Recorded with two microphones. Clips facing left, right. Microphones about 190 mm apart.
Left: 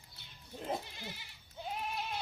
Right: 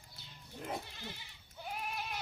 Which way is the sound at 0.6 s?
10° left (ahead or behind).